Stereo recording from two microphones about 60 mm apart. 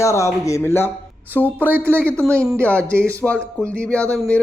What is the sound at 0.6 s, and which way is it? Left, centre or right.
Speech, left.